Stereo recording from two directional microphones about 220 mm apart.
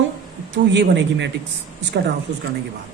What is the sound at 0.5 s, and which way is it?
Speech, 55° right (ahead or behind).